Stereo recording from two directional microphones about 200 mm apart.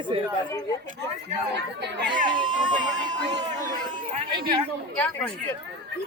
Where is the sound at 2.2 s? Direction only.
25° right (ahead or behind).